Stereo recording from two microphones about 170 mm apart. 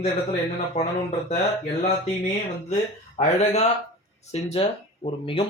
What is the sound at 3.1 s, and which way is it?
Speech, 40° left (ahead or behind).